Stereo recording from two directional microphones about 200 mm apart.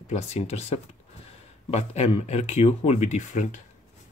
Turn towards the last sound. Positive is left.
turn(degrees=40)  # may be behind; listen again after turning